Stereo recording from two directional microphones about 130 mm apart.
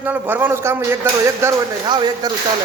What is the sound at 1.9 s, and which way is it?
Speech, 35° right (ahead or behind).